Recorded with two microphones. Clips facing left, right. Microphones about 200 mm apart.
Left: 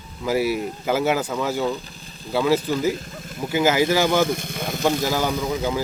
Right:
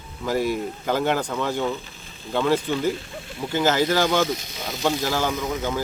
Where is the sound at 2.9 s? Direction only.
40° left (ahead or behind).